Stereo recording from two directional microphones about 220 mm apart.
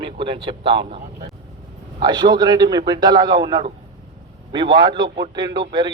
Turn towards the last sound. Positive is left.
turn(degrees=-20)  # may be behind; listen again after turning